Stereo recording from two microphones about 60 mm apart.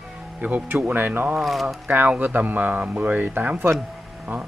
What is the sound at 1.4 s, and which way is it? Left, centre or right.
Speech, centre.